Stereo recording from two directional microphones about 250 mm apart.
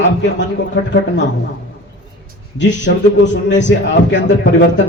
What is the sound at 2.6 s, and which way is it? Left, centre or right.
Speech, left.